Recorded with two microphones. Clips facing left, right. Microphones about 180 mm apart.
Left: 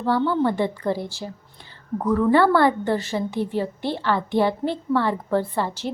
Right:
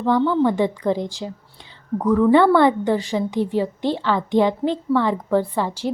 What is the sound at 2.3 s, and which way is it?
A woman's voice, 20° right (ahead or behind).